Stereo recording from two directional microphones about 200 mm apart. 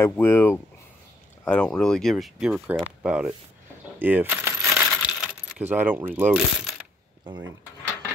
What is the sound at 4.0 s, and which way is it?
Coin, 10° right (ahead or behind).